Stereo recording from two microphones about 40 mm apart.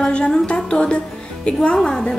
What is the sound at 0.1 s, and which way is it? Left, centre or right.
A woman's voice, left.